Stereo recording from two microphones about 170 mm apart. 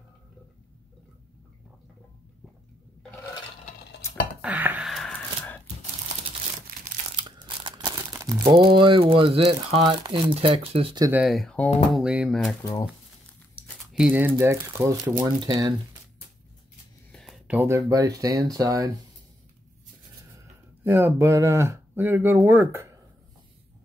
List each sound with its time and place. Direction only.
4.4 s a sound: 10° right (ahead or behind); by 5.6 s 10° left (ahead or behind)
6.7 s crumpling: 60° right (ahead or behind)
7.2 s crumpling: 25° right (ahead or behind)
8.1 s crumpling: 15° right (ahead or behind)
8.5 s speech: 30° right (ahead or behind)
11.0 s speech: 10° right (ahead or behind)
11.2 s speech: centre (ahead or behind)
11.9 s speech: 5° right (ahead or behind)
13.9 s speech: 10° right (ahead or behind)
17.1 s a sound: centre (ahead or behind)
17.6 s speech: 15° right (ahead or behind)
20.8 s speech: 15° right (ahead or behind)